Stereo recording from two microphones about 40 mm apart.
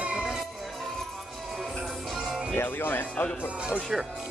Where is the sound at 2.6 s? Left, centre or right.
Left.